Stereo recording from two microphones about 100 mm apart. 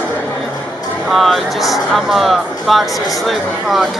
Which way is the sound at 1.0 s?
Centre (ahead or behind).